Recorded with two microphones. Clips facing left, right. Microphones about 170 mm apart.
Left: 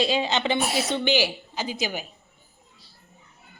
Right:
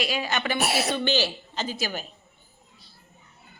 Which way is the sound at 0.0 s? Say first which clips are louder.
Left 4 dB; 25° left (ahead or behind).